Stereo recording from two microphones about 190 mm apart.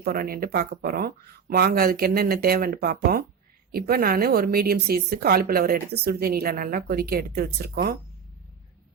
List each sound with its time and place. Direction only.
0.0 s a woman's voice: 50° right (ahead or behind)